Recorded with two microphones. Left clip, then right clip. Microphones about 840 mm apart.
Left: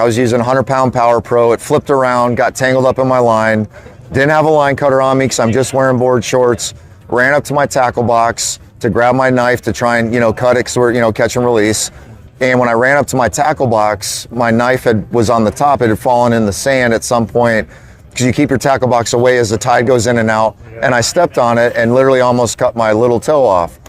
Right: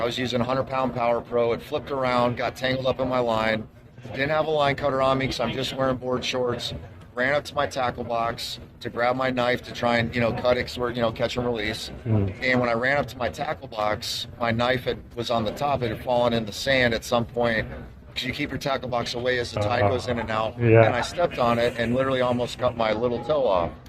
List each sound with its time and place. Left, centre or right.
0.0 s speech: left
20.9 s speech: left